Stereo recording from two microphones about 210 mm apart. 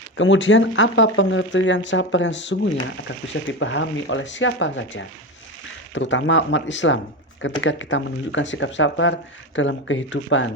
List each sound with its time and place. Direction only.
0.2 s speech: 65° left (ahead or behind)